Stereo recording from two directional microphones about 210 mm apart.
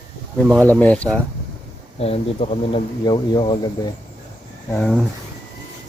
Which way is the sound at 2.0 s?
30° left (ahead or behind).